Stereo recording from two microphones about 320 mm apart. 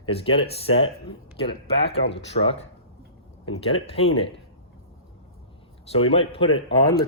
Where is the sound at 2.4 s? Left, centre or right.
Centre.